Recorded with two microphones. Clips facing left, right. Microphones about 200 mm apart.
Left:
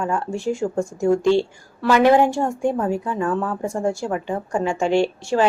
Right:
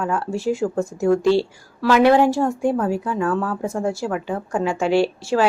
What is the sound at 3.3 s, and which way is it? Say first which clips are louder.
Speech: even; 15° left (ahead or behind).